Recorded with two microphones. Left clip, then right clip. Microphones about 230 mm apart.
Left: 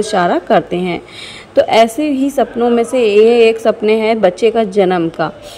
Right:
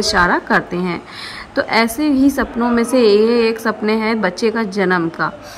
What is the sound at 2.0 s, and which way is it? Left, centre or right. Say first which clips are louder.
A woman's voice: left 1 dB; left.